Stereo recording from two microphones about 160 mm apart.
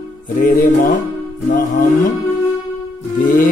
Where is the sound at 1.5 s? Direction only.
55° left (ahead or behind).